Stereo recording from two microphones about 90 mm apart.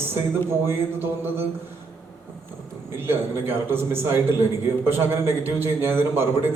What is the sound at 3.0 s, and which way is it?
A man's voice, 25° right (ahead or behind).